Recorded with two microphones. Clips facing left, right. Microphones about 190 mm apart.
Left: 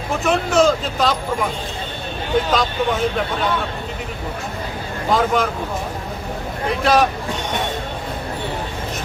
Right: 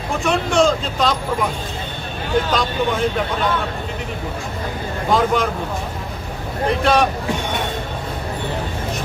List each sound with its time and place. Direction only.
0.1 s speech: centre (ahead or behind)
2.5 s speech: centre (ahead or behind)
5.0 s speech: centre (ahead or behind)
6.7 s speech: centre (ahead or behind)